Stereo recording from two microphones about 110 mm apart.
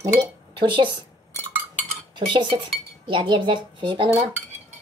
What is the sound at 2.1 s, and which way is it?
Dishes, 45° right (ahead or behind).